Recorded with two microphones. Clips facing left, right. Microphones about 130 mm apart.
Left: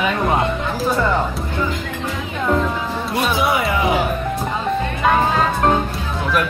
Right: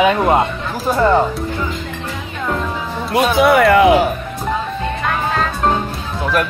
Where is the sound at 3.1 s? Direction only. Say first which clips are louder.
Right 7 dB; 75° right (ahead or behind).